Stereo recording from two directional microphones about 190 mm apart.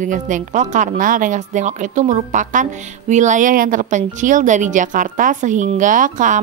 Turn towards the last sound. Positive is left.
turn(degrees=-40)  # may be behind; listen again after turning